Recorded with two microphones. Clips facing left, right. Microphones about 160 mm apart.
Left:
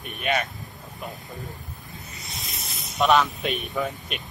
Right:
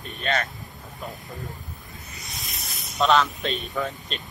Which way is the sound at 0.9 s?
Centre (ahead or behind).